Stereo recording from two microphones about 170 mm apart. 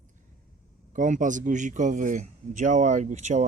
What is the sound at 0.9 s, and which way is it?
A man's voice, 50° right (ahead or behind).